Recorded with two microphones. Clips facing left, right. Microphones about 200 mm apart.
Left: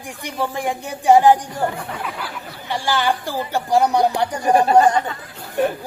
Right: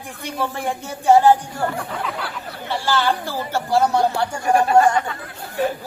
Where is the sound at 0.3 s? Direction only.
15° left (ahead or behind).